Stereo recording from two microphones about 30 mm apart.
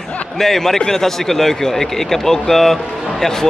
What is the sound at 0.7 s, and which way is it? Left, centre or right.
A man's voice, centre.